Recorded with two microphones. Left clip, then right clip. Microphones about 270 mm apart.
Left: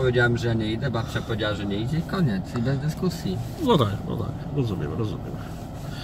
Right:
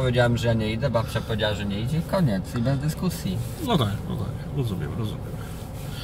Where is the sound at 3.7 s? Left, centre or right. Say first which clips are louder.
Left 4 dB; centre.